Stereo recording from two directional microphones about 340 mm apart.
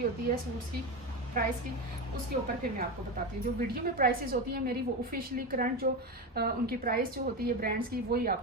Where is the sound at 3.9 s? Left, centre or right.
Right.